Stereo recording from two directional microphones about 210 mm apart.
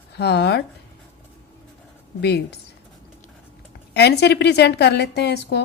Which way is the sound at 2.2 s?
50° left (ahead or behind).